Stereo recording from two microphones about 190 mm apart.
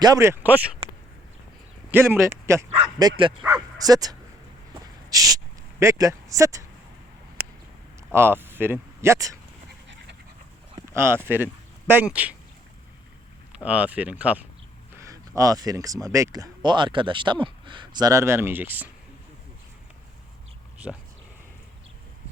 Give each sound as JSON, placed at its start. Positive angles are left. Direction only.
{"t": 0.0, "sound": "speech", "side_deg": -20}
{"t": 1.9, "sound": "speech", "side_deg": -10}
{"t": 4.7, "sound": "a sound", "side_deg": -20}
{"t": 5.8, "sound": "speech", "side_deg": -15}
{"t": 7.4, "sound": "a sound", "side_deg": -55}
{"t": 8.1, "sound": "speech", "side_deg": -10}
{"t": 10.8, "sound": "speech", "side_deg": -15}
{"t": 13.6, "sound": "speech", "side_deg": -5}